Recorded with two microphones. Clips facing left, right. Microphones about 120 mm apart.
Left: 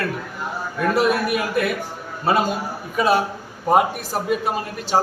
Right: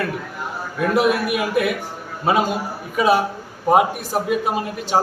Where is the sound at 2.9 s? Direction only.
10° right (ahead or behind).